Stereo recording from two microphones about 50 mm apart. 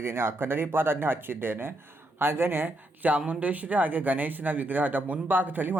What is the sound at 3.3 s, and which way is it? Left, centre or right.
Speech, right.